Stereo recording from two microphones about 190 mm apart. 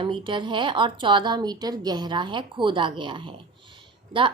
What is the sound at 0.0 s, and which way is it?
A woman's voice, 25° right (ahead or behind).